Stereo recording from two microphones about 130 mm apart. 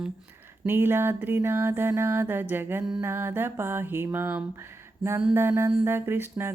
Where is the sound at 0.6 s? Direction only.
15° right (ahead or behind).